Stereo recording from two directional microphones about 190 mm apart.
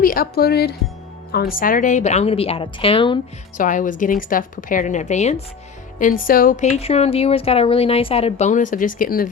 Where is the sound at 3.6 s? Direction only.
45° left (ahead or behind).